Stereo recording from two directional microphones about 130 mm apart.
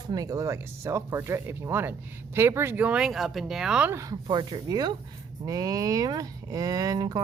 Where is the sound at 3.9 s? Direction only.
25° right (ahead or behind).